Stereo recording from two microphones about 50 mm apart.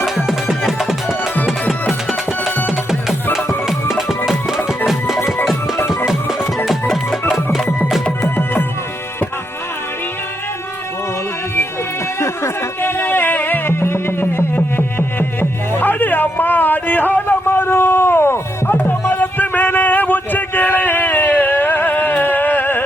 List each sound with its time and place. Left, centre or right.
0.3 s music: centre
3.7 s music: centre
6.7 s music: centre
12.8 s music: left
19.1 s a sound: left